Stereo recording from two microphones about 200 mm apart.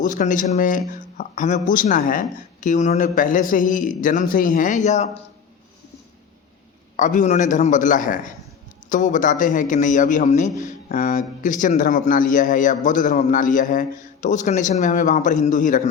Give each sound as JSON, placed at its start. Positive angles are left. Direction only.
{"t": 0.0, "sound": "a man's voice", "side_deg": 40}
{"t": 6.9, "sound": "a man's voice", "side_deg": 40}